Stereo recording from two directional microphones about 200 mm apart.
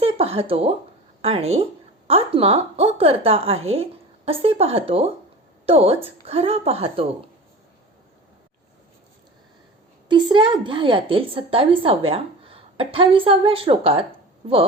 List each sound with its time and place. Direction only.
0.0 s a woman's voice: 30° right (ahead or behind)
10.1 s a woman's voice: 25° right (ahead or behind)